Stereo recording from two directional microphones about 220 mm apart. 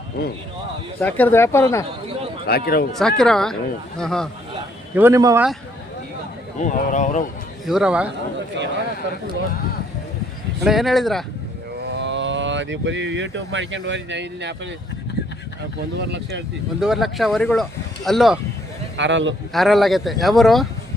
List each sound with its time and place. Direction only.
0.2 s a man's voice: 45° left (ahead or behind)
1.0 s speech: 5° left (ahead or behind)
2.5 s a man's voice: 45° left (ahead or behind)
3.0 s speech: centre (ahead or behind)
4.9 s speech: 10° right (ahead or behind)
6.6 s speech: 35° left (ahead or behind)
7.7 s speech: 5° right (ahead or behind)
10.6 s speech: centre (ahead or behind)
11.9 s speech: 55° right (ahead or behind)
16.0 s speech: 50° right (ahead or behind)
16.8 s speech: centre (ahead or behind)
18.9 s a man's voice: 55° right (ahead or behind)
19.5 s speech: centre (ahead or behind)